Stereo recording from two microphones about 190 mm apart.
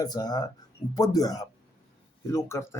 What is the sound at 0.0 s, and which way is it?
Speech, 20° left (ahead or behind).